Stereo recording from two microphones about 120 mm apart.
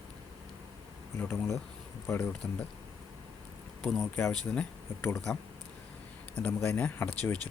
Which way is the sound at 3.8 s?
5° left (ahead or behind).